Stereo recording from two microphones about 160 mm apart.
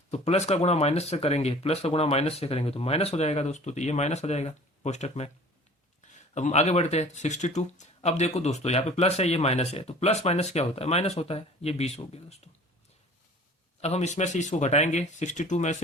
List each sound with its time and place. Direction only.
0.1 s speech: 40° left (ahead or behind)
13.8 s speech: 45° left (ahead or behind)